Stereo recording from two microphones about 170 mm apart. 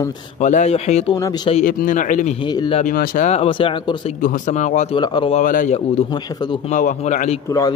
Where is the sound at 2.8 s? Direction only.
55° left (ahead or behind).